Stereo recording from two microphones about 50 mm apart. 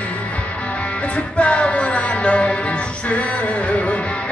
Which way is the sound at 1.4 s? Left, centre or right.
Left.